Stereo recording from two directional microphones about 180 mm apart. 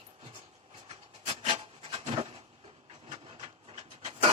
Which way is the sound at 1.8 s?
30° right (ahead or behind).